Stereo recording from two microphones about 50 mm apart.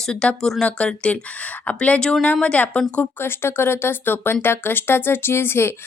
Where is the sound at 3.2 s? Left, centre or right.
Left.